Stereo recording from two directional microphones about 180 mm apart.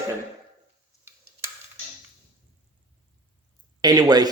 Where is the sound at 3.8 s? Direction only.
20° right (ahead or behind).